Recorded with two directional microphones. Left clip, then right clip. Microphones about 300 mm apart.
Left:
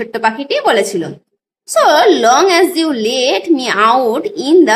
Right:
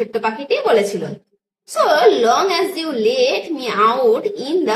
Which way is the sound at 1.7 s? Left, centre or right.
Left.